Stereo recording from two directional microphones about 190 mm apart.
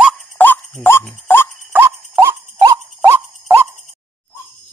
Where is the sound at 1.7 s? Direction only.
10° right (ahead or behind).